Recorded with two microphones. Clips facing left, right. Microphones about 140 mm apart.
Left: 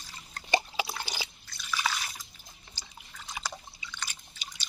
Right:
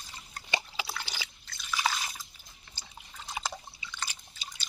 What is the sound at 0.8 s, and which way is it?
Liquid, 20° left (ahead or behind).